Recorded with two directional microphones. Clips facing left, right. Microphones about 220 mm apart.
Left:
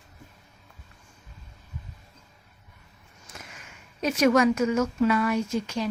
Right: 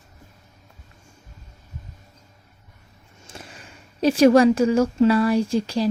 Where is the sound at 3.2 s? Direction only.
30° right (ahead or behind).